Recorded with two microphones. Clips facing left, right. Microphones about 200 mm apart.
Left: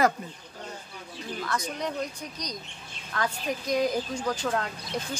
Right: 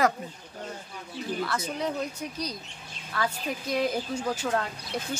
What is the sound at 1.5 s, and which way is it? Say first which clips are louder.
Speech: even; 5° right (ahead or behind).